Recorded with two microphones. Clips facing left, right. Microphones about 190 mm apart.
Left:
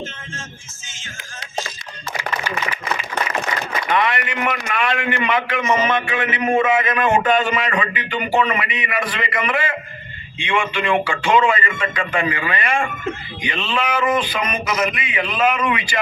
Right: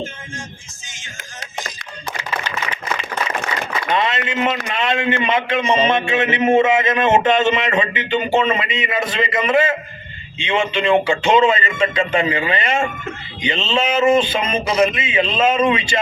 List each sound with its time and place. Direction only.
3.9 s a man's voice: 25° right (ahead or behind)